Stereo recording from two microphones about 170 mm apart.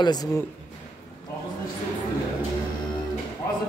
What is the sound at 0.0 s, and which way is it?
Speech, 25° left (ahead or behind).